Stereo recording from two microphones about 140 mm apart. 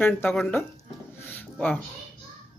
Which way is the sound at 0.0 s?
15° left (ahead or behind).